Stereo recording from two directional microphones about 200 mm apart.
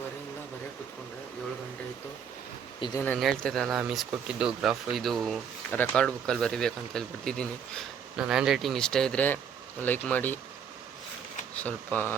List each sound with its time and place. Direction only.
2.8 s speech: 15° left (ahead or behind)
3.1 s speech: 5° left (ahead or behind)
11.6 s speech: 10° left (ahead or behind)